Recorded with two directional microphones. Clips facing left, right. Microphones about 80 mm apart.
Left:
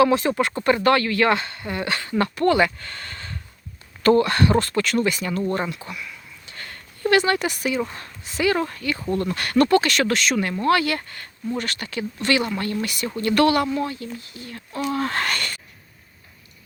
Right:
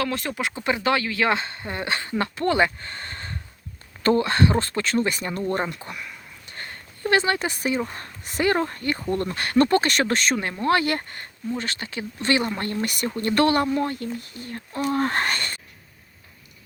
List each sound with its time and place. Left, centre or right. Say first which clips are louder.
0.0 s speech: left 9 dB; centre
0.6 s speech: left 4 dB; centre; by 5.4 s right
5.7 s a sound: left 1 dB; right
7.1 s speech: left 2 dB; right
8.2 s speech: left 1 dB; right
8.5 s speech: even; right
11.5 s speech: left 2 dB; right
13.2 s speech: left 2 dB; right